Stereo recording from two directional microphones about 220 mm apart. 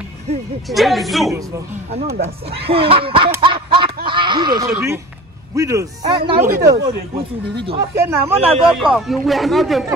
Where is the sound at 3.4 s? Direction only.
25° right (ahead or behind).